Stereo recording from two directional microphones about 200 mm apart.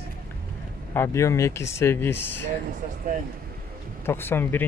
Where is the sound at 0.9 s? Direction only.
15° left (ahead or behind).